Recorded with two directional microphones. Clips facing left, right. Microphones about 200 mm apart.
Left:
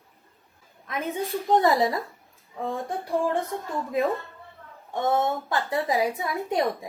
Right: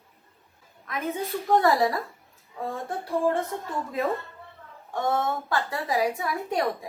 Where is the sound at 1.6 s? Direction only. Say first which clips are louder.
Even; 20° left (ahead or behind).